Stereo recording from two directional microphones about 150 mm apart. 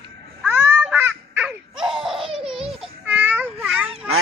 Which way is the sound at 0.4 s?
15° right (ahead or behind).